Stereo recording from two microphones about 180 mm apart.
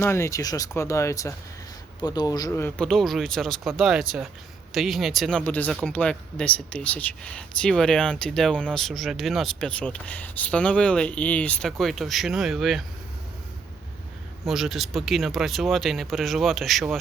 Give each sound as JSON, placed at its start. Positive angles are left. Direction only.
{"t": 0.0, "sound": "speech", "side_deg": 15}
{"t": 14.4, "sound": "speech", "side_deg": 0}